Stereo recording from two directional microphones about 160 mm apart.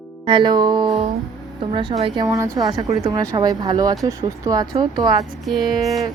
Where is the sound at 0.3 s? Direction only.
30° right (ahead or behind).